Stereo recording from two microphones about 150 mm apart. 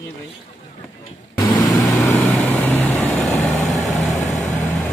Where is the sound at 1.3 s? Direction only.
25° left (ahead or behind).